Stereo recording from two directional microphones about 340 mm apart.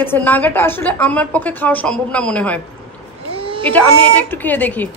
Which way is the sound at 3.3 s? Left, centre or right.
Centre.